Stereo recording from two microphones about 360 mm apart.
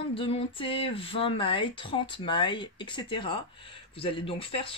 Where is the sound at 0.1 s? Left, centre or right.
Centre.